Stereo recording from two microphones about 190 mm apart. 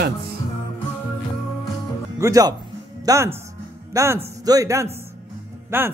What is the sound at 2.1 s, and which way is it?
A man's voice, 15° right (ahead or behind).